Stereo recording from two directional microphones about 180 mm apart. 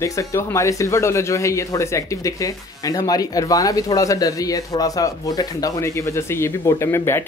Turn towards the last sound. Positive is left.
turn(degrees=15)  # may be behind; listen again after turning